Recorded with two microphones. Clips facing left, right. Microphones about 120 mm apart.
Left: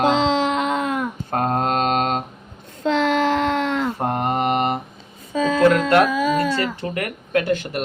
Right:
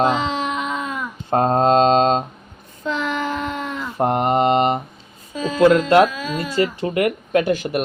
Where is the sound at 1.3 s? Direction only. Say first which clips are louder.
Right 6 dB; 25° right (ahead or behind).